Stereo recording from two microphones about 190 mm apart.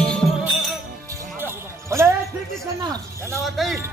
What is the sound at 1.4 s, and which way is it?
Music, 15° right (ahead or behind).